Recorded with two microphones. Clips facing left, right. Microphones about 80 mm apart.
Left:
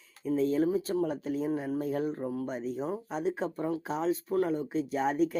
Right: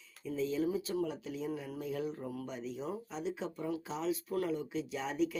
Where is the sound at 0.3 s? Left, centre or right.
Left.